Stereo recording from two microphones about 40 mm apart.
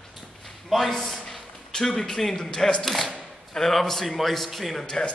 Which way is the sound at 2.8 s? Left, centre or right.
Centre.